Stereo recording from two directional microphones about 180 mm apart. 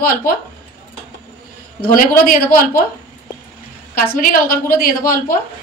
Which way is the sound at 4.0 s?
50° left (ahead or behind).